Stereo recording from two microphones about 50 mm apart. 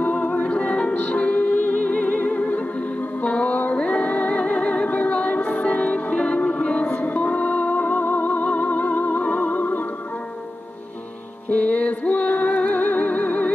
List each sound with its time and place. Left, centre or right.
0.0 s music: left
6.8 s music: left
11.5 s music: left